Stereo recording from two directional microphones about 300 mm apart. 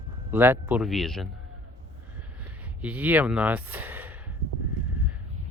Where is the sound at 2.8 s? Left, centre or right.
Centre.